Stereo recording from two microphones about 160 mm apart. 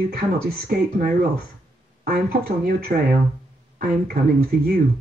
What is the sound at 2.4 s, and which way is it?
Speech, 60° right (ahead or behind).